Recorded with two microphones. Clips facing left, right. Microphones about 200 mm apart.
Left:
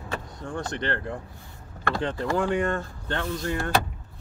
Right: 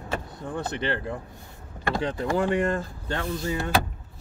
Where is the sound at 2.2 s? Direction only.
5° right (ahead or behind).